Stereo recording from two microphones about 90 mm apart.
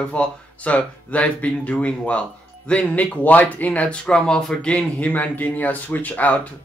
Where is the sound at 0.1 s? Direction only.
15° left (ahead or behind).